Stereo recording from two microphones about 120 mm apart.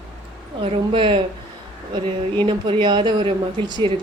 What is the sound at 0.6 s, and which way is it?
Speech, 45° right (ahead or behind).